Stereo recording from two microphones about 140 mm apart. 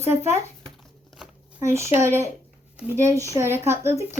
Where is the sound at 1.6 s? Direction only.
20° right (ahead or behind).